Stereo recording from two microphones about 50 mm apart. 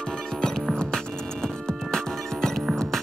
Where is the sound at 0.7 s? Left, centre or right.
Centre.